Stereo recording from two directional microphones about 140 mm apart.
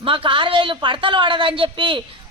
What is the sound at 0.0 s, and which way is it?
Speech, 40° right (ahead or behind).